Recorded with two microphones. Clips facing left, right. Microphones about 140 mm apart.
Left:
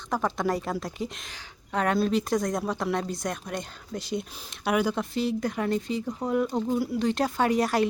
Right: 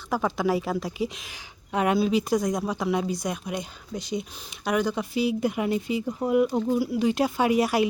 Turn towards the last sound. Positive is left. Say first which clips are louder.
# right 2 dB
turn(degrees=-5)  # may be behind; listen again after turning